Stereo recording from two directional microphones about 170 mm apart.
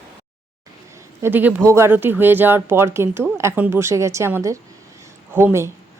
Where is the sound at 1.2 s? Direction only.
10° right (ahead or behind).